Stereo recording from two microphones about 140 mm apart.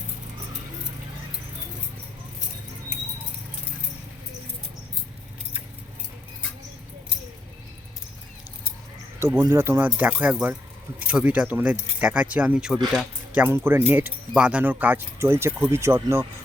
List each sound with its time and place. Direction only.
9.2 s speech: 20° right (ahead or behind); by 13.4 s 5° right (ahead or behind)
13.4 s speech: 15° right (ahead or behind)